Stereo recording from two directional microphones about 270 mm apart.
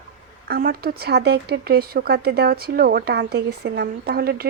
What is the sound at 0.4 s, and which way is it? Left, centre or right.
Speech, right.